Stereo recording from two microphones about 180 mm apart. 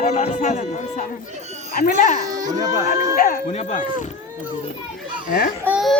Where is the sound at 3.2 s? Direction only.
55° left (ahead or behind).